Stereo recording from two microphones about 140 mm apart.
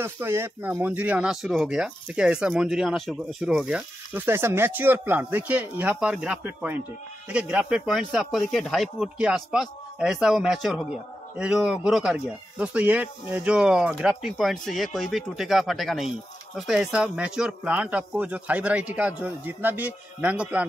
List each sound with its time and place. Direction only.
0.0 s speech: 15° right (ahead or behind)